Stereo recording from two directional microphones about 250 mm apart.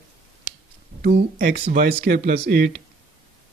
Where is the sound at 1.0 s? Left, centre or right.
Right.